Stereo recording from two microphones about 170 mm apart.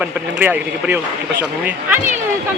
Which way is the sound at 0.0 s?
10° right (ahead or behind).